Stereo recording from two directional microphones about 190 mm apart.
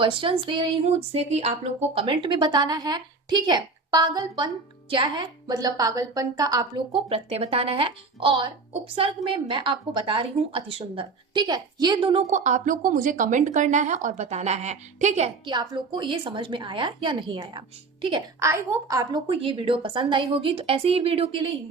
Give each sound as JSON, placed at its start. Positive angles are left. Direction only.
{"t": 0.0, "sound": "speech", "side_deg": -25}
{"t": 12.3, "sound": "speech", "side_deg": -40}
{"t": 15.4, "sound": "speech", "side_deg": -25}